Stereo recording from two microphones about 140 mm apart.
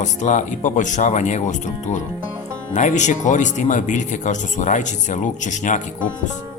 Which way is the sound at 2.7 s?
65° left (ahead or behind).